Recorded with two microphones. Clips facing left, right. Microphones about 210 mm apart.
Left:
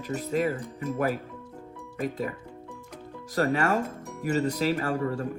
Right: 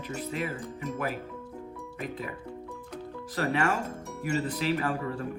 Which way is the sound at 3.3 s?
45° left (ahead or behind).